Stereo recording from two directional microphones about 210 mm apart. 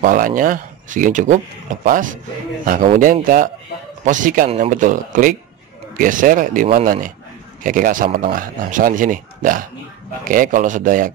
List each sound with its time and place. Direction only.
0.0 s speech: 40° right (ahead or behind)